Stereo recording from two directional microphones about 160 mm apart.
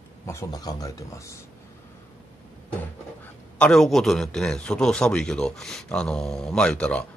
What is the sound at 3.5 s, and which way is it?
A man's voice, 5° left (ahead or behind).